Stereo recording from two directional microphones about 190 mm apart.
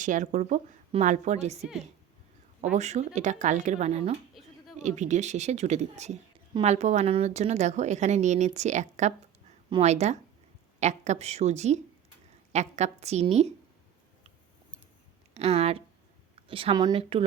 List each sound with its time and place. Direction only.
0.0 s a woman's voice: 40° right (ahead or behind)
2.7 s a woman's voice: 35° right (ahead or behind)
15.4 s a woman's voice: 35° right (ahead or behind)